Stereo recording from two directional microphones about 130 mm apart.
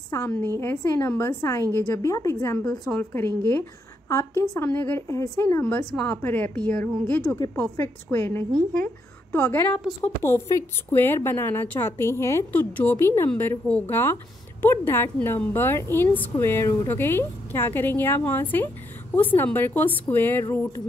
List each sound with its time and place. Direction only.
0.1 s a woman's voice: 15° left (ahead or behind)